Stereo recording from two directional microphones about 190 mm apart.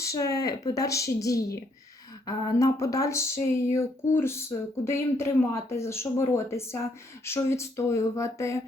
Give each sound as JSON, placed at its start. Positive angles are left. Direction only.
{"t": 0.0, "sound": "speech", "side_deg": 15}